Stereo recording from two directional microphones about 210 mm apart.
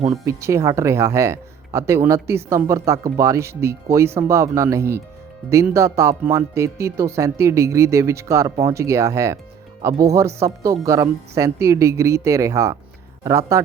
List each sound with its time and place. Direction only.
0.3 s speech: 15° right (ahead or behind)